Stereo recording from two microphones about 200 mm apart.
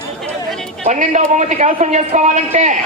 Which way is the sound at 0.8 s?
35° right (ahead or behind).